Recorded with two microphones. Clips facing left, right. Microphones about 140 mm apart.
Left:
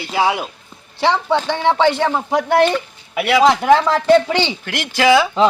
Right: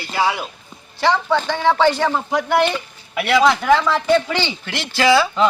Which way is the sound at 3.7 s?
35° left (ahead or behind).